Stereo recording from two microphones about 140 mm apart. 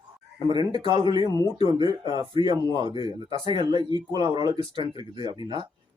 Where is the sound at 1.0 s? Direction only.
30° right (ahead or behind).